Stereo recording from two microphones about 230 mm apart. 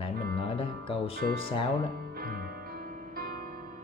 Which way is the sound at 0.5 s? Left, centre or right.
Left.